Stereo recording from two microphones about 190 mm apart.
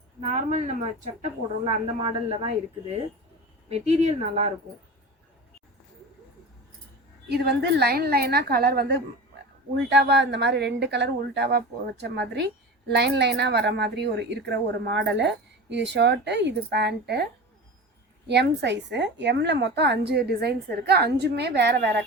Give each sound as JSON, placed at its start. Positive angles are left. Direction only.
{"t": 0.2, "sound": "speech", "side_deg": -40}
{"t": 1.6, "sound": "speech", "side_deg": -25}
{"t": 3.7, "sound": "speech", "side_deg": -35}
{"t": 7.3, "sound": "a woman's voice", "side_deg": -60}
{"t": 18.3, "sound": "a woman's voice", "side_deg": -65}